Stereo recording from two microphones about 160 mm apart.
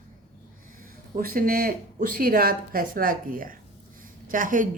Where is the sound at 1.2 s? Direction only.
65° right (ahead or behind).